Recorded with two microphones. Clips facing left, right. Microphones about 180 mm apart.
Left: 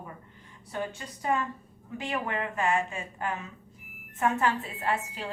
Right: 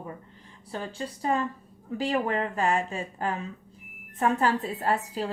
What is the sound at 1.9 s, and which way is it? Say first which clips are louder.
A woman's voice: right 6 dB; 35° right (ahead or behind).